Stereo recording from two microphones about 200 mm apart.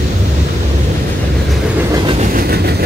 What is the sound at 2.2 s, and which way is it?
Train, 45° right (ahead or behind).